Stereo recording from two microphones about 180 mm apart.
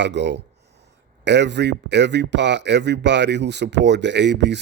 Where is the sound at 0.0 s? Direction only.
75° right (ahead or behind).